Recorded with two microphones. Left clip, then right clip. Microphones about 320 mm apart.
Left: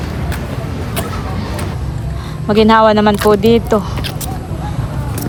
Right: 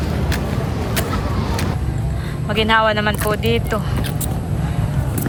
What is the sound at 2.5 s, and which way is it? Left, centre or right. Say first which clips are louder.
Speech: left 6 dB; centre.